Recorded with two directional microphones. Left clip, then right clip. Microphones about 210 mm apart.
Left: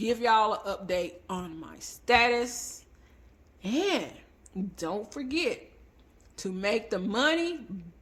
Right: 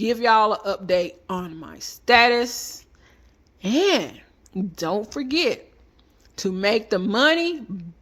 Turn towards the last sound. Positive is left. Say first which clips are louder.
# right 8 dB
turn(degrees=-35)  # may be behind; listen again after turning